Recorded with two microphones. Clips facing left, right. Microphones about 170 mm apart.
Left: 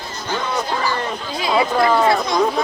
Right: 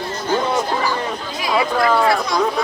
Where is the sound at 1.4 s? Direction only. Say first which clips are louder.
Left 1 dB; 25° left (ahead or behind).